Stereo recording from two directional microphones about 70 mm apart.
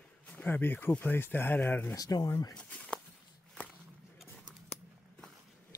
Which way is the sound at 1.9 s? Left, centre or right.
Left.